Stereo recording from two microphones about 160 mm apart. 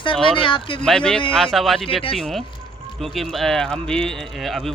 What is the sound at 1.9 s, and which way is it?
Speech, 35° left (ahead or behind).